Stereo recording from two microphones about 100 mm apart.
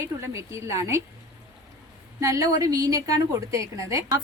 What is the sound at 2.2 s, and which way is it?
A woman's voice, 35° right (ahead or behind).